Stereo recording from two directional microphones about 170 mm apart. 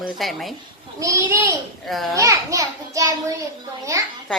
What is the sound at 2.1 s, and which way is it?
A child's voice, 20° right (ahead or behind).